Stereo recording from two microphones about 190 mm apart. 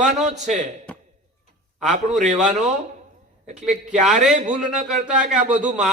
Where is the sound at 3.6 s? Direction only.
40° right (ahead or behind).